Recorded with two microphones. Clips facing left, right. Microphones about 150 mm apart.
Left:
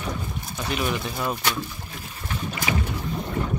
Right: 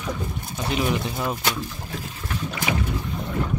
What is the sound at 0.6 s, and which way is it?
Speech, 20° right (ahead or behind).